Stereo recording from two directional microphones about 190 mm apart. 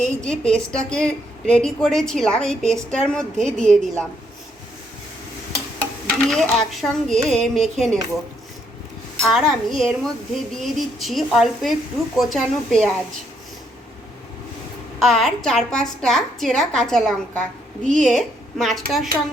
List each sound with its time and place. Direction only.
0.0 s a woman's voice: 40° right (ahead or behind)
0.3 s a woman's voice: 5° left (ahead or behind)
6.1 s a woman's voice: centre (ahead or behind)
9.2 s a woman's voice: centre (ahead or behind)
14.9 s a woman's voice: centre (ahead or behind)